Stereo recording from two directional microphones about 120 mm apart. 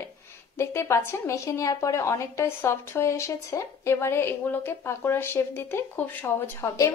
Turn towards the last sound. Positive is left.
turn(degrees=15)  # may be behind; listen again after turning